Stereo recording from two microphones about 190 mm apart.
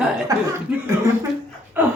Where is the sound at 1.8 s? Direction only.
10° right (ahead or behind).